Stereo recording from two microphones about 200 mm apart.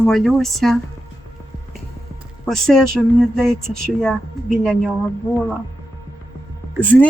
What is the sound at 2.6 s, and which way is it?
Music, centre (ahead or behind).